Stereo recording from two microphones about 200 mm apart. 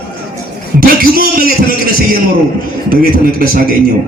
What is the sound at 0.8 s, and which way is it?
Speech, 50° right (ahead or behind).